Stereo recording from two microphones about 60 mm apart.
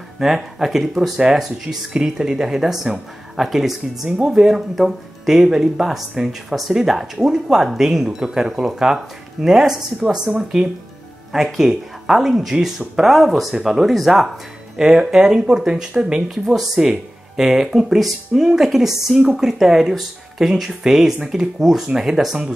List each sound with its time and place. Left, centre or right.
0.2 s speech: centre